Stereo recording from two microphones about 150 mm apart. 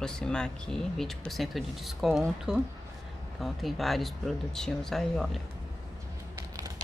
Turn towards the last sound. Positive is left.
turn(degrees=-20)  # may be behind; listen again after turning